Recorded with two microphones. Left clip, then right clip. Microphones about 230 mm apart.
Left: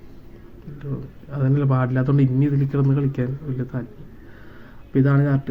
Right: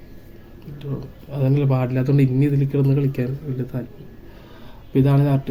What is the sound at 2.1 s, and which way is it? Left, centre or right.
Speech, left.